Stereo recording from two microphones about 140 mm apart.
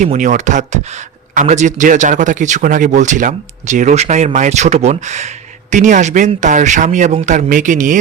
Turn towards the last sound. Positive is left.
turn(degrees=-65)  # may be behind; listen again after turning